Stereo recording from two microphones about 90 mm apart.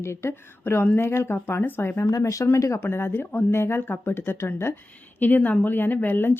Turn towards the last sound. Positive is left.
turn(degrees=25)  # may be behind; listen again after turning